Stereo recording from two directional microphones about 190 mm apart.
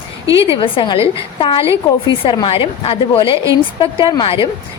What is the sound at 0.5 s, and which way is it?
A woman's voice, 25° left (ahead or behind).